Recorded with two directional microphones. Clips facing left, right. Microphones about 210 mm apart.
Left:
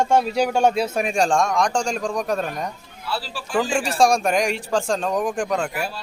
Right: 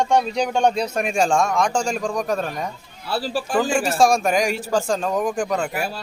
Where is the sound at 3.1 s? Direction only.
40° right (ahead or behind).